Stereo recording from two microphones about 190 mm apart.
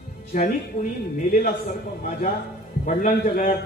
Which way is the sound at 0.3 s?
40° left (ahead or behind).